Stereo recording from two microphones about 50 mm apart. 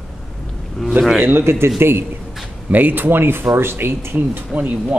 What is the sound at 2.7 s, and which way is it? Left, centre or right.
Speech, right.